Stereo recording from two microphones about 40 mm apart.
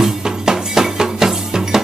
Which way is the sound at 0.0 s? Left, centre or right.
Centre.